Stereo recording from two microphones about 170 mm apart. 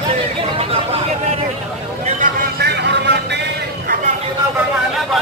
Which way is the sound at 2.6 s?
85° right.